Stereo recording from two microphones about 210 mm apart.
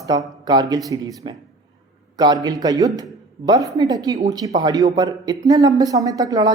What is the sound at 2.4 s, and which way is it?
Speech, 20° right (ahead or behind).